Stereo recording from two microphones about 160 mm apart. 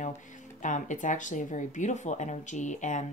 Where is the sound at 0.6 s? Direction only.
50° left (ahead or behind).